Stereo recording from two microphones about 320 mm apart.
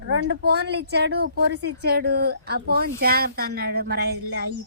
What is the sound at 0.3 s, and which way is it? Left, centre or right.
A woman's voice, right.